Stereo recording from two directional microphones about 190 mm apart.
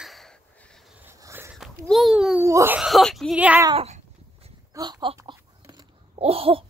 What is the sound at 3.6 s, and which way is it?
Speech, 30° right (ahead or behind).